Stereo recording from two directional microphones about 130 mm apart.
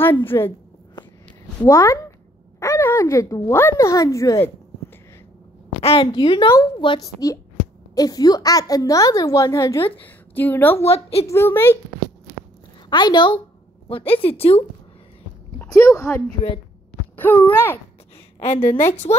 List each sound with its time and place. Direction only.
0.0 s a woman's voice: 15° left (ahead or behind)
1.6 s a woman's voice: 20° left (ahead or behind)
5.8 s a woman's voice: 45° left (ahead or behind)
7.1 s a woman's voice: 25° left (ahead or behind)
10.8 s a woman's voice: 50° left (ahead or behind)
11.2 s a woman's voice: 20° left (ahead or behind)
12.9 s a woman's voice: 35° left (ahead or behind)
15.6 s speech: 20° left (ahead or behind)
17.2 s speech: 15° left (ahead or behind)
18.4 s a woman's voice: 50° left (ahead or behind)